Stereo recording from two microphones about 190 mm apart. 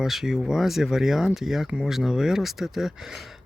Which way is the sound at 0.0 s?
Centre (ahead or behind).